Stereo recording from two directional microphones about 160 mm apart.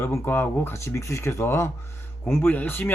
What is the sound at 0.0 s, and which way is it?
Speech, 15° left (ahead or behind).